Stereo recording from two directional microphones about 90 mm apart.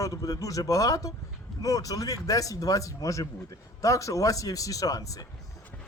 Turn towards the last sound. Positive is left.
turn(degrees=40)  # may be behind; listen again after turning